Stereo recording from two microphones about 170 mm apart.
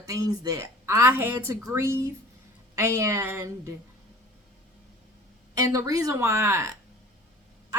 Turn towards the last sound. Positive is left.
turn(degrees=-15)  # may be behind; listen again after turning